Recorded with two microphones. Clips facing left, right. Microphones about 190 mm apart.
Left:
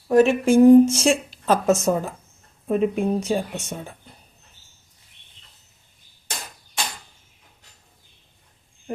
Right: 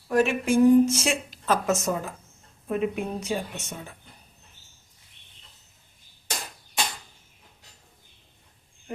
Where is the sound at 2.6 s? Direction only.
35° left (ahead or behind).